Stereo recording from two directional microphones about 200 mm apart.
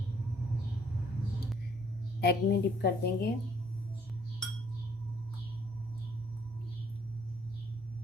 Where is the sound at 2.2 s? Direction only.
55° left (ahead or behind).